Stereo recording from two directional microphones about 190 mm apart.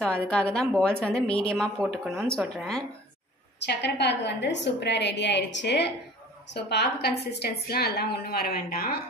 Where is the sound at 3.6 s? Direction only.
65° left (ahead or behind).